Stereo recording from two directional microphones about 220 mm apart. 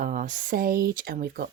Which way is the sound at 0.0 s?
35° right (ahead or behind).